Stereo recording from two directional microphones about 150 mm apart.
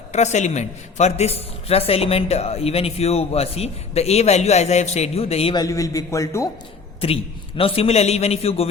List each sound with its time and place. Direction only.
0.1 s a man's voice: 50° left (ahead or behind)
5.5 s a man's voice: 20° left (ahead or behind)
7.0 s a man's voice: 40° left (ahead or behind)